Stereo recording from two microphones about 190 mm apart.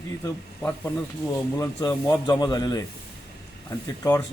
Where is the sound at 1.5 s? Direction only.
15° left (ahead or behind).